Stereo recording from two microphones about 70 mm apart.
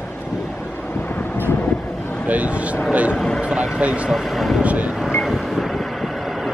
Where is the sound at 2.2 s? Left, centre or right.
Right.